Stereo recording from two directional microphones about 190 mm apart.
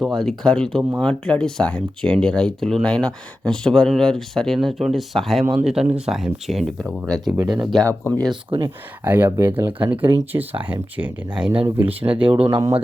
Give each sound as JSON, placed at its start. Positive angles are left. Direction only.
{"t": 0.0, "sound": "speech", "side_deg": 0}
{"t": 7.9, "sound": "speech", "side_deg": 10}
{"t": 8.4, "sound": "speech", "side_deg": -20}
{"t": 9.0, "sound": "speech", "side_deg": -10}
{"t": 12.5, "sound": "speech", "side_deg": -20}